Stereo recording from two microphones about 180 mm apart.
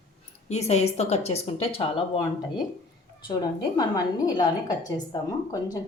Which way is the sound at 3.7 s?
20° left (ahead or behind).